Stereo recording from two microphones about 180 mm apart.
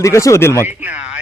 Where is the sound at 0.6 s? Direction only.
10° right (ahead or behind).